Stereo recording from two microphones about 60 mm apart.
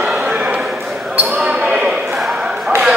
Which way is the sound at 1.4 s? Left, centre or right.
Centre.